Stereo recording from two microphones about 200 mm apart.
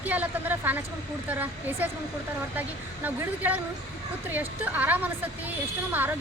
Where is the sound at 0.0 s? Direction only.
10° right (ahead or behind).